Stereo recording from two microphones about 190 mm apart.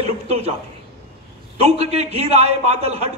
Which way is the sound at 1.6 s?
35° right (ahead or behind).